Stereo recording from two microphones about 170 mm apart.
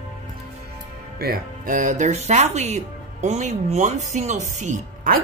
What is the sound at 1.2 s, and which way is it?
Speech, 55° right (ahead or behind).